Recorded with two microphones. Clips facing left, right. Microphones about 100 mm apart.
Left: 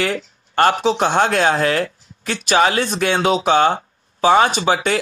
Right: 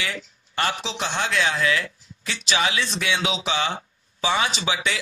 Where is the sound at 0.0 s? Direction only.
50° left (ahead or behind).